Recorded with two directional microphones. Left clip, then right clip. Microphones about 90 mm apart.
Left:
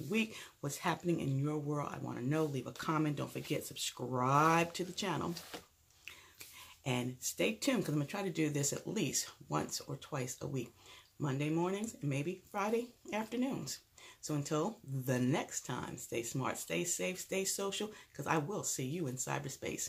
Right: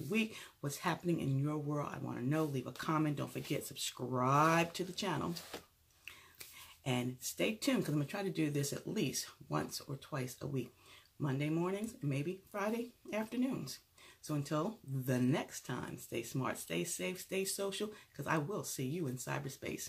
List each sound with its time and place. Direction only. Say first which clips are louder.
0.1 s speech: left 1 dB; 20° left (ahead or behind)
6.8 s speech: left 1 dB; 20° left (ahead or behind)